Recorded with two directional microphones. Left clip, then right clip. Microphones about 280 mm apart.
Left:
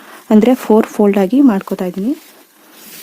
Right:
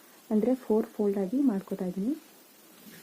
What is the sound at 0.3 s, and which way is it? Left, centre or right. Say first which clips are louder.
Speech: left 16 dB; left.